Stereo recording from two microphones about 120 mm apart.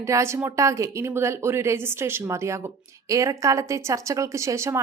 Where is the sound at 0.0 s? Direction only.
25° right (ahead or behind).